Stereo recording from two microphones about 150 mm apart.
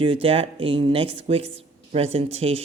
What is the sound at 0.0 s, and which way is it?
Speech, 40° right (ahead or behind).